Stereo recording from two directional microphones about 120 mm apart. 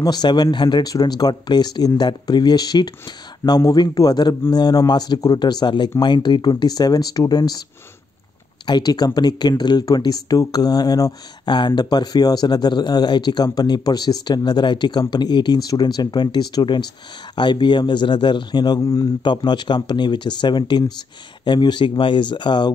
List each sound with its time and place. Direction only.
0.0 s speech: 35° left (ahead or behind)
8.6 s speech: 35° left (ahead or behind)